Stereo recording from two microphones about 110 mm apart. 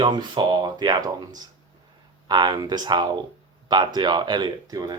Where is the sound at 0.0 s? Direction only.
45° right (ahead or behind).